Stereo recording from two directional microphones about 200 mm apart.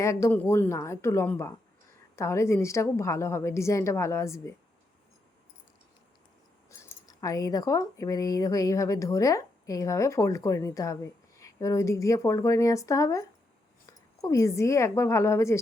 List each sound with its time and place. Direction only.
0.0 s speech: 15° left (ahead or behind)
6.7 s speech: 15° left (ahead or behind)